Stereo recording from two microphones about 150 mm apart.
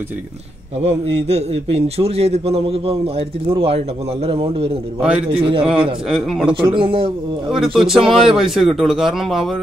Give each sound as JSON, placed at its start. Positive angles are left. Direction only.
{"t": 0.7, "sound": "a man's voice", "side_deg": -45}
{"t": 5.0, "sound": "a man's voice", "side_deg": -5}
{"t": 5.3, "sound": "a man's voice", "side_deg": -35}
{"t": 6.0, "sound": "speech", "side_deg": 0}
{"t": 6.5, "sound": "a man's voice", "side_deg": -35}
{"t": 7.4, "sound": "speech", "side_deg": 0}